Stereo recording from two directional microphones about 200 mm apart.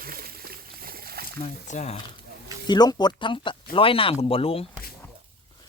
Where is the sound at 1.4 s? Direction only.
35° left (ahead or behind).